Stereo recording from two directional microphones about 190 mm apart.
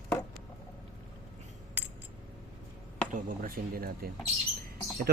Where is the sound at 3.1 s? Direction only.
50° right (ahead or behind).